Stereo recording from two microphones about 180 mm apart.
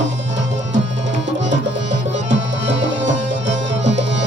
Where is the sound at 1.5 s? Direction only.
90° right.